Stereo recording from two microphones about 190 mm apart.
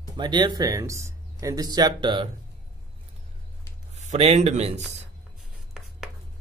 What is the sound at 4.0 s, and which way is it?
Speech, 35° right (ahead or behind).